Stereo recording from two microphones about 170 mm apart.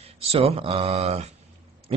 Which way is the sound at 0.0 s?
35° right (ahead or behind).